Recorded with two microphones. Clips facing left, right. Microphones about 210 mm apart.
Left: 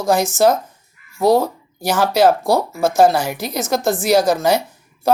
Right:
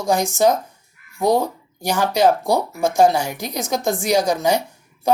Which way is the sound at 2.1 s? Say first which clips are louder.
Left 2 dB; 5° left (ahead or behind).